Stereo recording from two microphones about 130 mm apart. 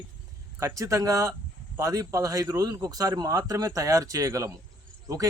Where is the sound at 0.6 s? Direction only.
25° right (ahead or behind).